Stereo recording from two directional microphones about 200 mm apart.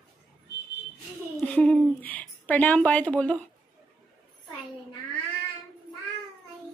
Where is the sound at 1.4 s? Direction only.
5° left (ahead or behind).